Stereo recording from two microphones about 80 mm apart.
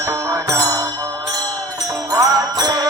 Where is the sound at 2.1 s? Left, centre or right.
Right.